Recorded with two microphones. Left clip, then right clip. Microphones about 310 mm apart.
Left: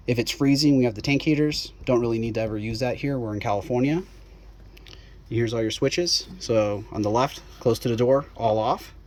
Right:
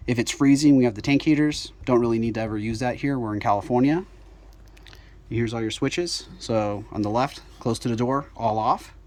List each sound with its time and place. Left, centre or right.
0.0 s speech: centre
5.3 s speech: centre
5.9 s speech: right
6.5 s speech: centre